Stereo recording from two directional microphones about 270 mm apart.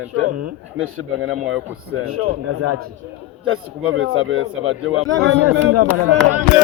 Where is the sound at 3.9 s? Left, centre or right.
Right.